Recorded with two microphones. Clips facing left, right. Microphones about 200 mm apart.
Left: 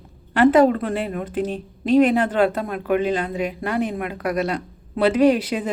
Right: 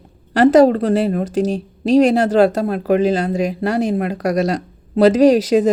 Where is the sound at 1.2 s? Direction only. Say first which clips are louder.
Right 6 dB; 90° right.